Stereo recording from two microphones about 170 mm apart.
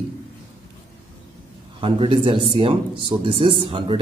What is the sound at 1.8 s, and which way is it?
A man's voice, 30° right (ahead or behind).